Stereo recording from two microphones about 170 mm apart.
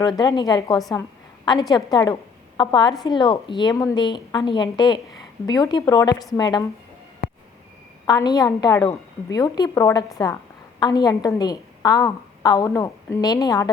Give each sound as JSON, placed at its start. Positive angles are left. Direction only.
{"t": 0.2, "sound": "a woman's voice", "side_deg": 25}
{"t": 8.0, "sound": "a woman's voice", "side_deg": 20}